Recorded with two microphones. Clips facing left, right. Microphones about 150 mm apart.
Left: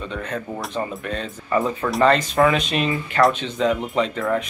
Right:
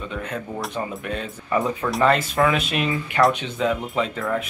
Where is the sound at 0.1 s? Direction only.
10° right (ahead or behind).